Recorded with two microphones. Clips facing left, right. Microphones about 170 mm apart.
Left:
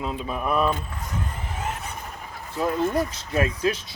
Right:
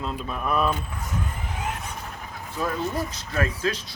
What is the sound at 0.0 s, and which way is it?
Speech, 10° left (ahead or behind).